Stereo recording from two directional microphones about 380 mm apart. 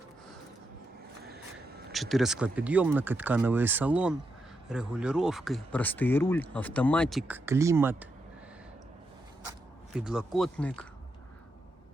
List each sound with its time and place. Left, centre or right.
1.2 s a sound: right
1.9 s speech: centre
9.9 s speech: centre